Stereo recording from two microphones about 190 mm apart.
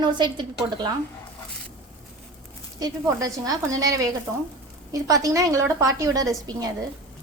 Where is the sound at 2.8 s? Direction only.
20° right (ahead or behind).